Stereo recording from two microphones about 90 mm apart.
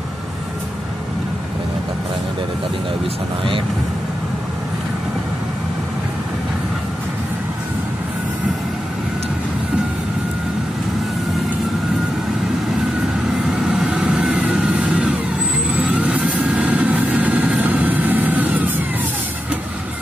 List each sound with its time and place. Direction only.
13.5 s vehicle: 10° right (ahead or behind)